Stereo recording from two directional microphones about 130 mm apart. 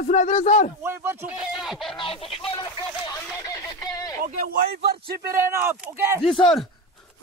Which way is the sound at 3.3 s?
25° left (ahead or behind).